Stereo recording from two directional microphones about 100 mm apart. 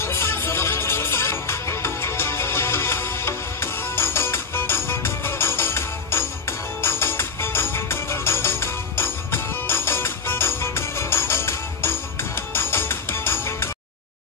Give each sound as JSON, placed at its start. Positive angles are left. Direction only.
{"t": 0.0, "sound": "music", "side_deg": 25}